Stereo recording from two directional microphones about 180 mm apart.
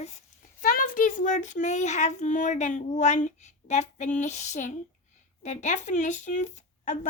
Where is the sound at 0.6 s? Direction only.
50° left (ahead or behind).